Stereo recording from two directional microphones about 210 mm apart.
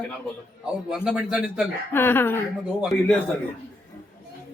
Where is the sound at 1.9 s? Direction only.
10° left (ahead or behind).